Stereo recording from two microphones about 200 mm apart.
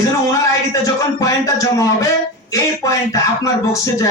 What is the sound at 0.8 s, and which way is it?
Speech, 15° left (ahead or behind).